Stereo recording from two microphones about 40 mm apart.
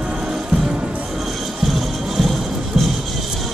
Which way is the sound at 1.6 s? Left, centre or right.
Centre.